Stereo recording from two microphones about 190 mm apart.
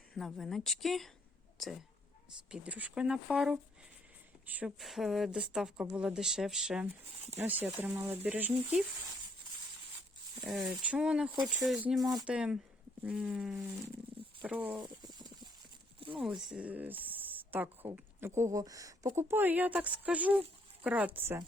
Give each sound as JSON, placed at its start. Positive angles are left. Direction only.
{"t": 0.1, "sound": "speech", "side_deg": 0}
{"t": 10.4, "sound": "speech", "side_deg": -5}
{"t": 14.8, "sound": "a sound", "side_deg": -20}
{"t": 16.1, "sound": "speech", "side_deg": 0}